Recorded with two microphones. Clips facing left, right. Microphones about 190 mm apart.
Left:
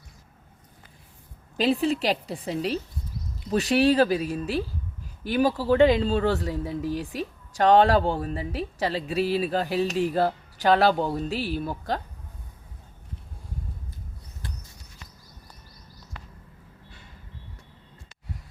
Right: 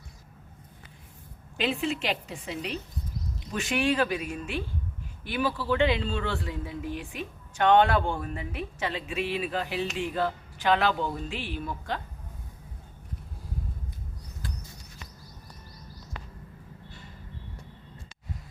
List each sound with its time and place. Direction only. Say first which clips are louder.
1.5 s speech: left 6 dB; 35° left (ahead or behind)